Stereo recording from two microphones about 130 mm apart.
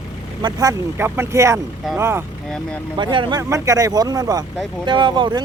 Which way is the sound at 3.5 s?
25° right (ahead or behind).